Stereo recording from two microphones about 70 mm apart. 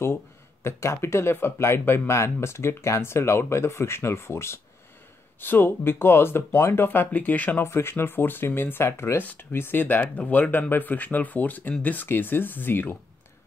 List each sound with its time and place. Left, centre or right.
0.7 s speech: left
7.6 s speech: left
9.2 s speech: left